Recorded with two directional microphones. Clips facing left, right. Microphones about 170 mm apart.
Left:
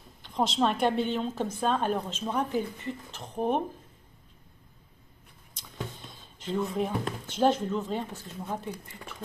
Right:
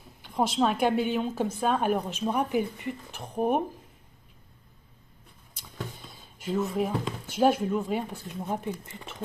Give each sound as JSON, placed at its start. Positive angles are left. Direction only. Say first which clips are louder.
{"t": 0.2, "sound": "a sound", "louder": "right 1 dB", "side_deg": -10}
{"t": 0.6, "sound": "speech", "louder": "right 1 dB", "side_deg": -5}
{"t": 5.5, "sound": "speech", "louder": "even", "side_deg": -10}